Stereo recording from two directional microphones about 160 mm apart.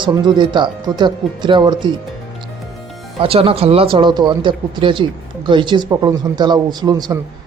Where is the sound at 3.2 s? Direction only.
35° right (ahead or behind).